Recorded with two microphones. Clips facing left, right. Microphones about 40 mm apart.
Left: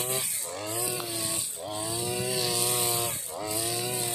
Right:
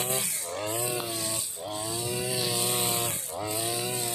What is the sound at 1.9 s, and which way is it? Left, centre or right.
Chainsaw, centre.